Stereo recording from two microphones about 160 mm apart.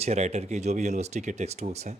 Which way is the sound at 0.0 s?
45° right (ahead or behind).